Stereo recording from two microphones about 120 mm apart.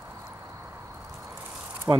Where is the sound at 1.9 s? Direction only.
35° right (ahead or behind).